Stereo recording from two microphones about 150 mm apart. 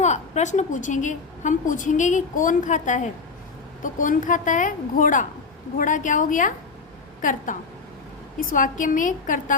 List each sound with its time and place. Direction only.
0.0 s a woman's voice: 50° left (ahead or behind)